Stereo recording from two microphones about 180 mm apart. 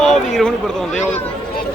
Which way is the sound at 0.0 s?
5° left (ahead or behind).